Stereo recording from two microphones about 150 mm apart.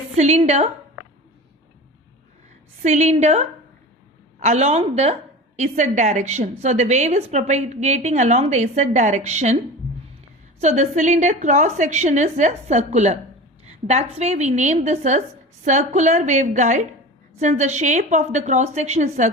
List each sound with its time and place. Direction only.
0.2 s a woman's voice: 50° right (ahead or behind)
2.8 s a woman's voice: 50° right (ahead or behind)
10.6 s a woman's voice: 50° right (ahead or behind)